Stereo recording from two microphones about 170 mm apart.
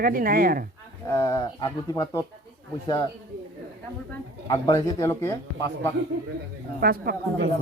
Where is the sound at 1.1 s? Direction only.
15° left (ahead or behind).